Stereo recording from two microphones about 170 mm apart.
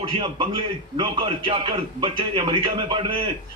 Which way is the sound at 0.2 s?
25° right (ahead or behind).